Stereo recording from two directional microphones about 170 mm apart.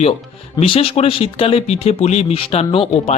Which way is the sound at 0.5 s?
30° left (ahead or behind).